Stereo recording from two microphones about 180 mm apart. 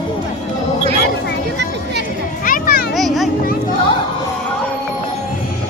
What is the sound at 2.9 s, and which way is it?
Children playing, centre (ahead or behind).